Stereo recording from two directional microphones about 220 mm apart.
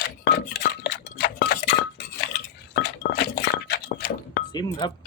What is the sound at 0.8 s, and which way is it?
Chink, 45° left (ahead or behind).